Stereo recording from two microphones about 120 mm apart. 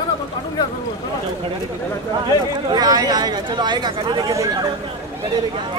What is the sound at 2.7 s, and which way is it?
Speech, 35° right (ahead or behind).